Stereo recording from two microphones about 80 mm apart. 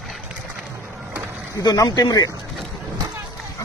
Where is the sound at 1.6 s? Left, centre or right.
Left.